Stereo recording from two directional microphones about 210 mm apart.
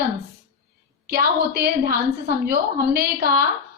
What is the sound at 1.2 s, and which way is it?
A woman's voice, 45° right (ahead or behind).